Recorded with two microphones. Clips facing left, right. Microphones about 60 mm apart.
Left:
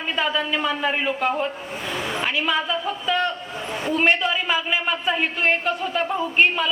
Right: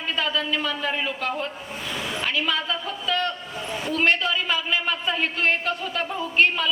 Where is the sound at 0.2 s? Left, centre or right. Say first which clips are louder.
Left 3 dB; centre.